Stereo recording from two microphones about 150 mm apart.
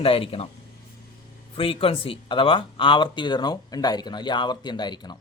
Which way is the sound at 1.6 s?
35° left (ahead or behind).